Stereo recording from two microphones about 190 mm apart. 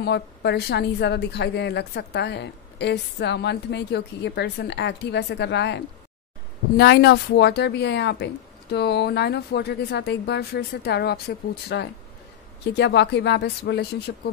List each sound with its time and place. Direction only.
0.0 s a woman's voice: 60° left (ahead or behind)
6.8 s a woman's voice: 60° left (ahead or behind)